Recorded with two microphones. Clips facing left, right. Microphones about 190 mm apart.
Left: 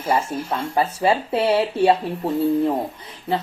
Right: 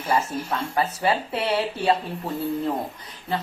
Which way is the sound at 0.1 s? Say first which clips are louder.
Left 2 dB; 30° left (ahead or behind).